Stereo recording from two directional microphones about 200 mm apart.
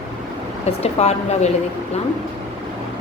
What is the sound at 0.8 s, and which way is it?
Speech, 30° left (ahead or behind).